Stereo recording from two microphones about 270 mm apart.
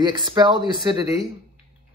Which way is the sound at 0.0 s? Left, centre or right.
Centre.